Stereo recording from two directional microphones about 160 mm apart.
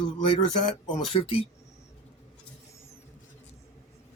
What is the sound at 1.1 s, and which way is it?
Speech, 35° left (ahead or behind).